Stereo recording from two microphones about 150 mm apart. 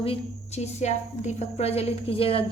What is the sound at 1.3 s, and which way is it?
A woman's voice, 45° left (ahead or behind).